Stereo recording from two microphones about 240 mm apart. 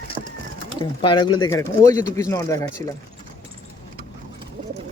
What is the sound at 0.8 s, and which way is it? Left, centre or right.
Speech, centre.